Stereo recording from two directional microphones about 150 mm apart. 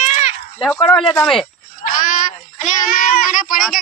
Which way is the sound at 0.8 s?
Centre (ahead or behind).